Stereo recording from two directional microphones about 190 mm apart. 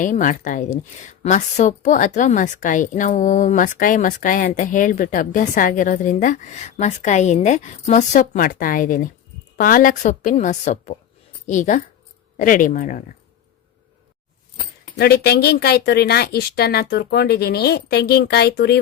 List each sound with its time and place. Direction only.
0.0 s a woman's voice: 45° left (ahead or behind)
14.9 s speech: 55° left (ahead or behind)